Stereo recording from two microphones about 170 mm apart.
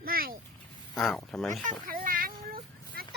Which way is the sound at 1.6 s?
55° right (ahead or behind).